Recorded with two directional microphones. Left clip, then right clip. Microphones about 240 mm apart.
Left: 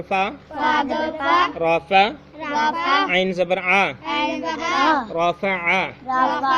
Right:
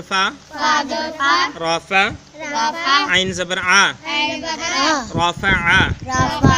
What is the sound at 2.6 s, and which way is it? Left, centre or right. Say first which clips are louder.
Child singing: right 2 dB; centre.